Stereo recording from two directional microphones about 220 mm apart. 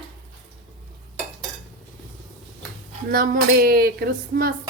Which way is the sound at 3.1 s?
40° right (ahead or behind).